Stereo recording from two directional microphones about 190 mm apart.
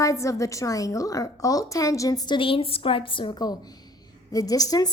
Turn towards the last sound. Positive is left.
turn(degrees=20)  # may be behind; listen again after turning